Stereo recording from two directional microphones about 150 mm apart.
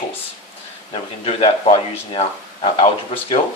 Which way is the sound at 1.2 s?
40° left (ahead or behind).